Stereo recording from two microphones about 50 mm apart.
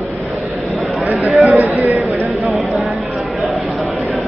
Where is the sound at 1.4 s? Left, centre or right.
Right.